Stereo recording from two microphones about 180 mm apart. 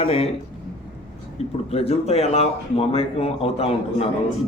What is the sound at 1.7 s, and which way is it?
Speech, 35° left (ahead or behind).